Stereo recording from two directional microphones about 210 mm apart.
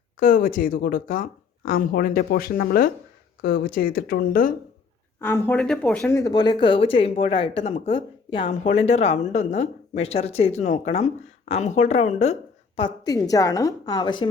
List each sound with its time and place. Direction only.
0.2 s speech: 40° left (ahead or behind)
5.2 s speech: 10° left (ahead or behind)